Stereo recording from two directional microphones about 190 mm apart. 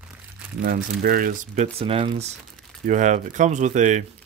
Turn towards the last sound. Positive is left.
turn(degrees=-40)  # may be behind; listen again after turning